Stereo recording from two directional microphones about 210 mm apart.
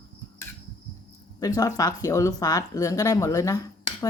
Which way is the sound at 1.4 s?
15° left (ahead or behind).